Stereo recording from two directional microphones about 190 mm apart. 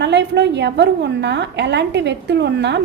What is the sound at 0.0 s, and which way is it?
A woman's voice, 65° right (ahead or behind).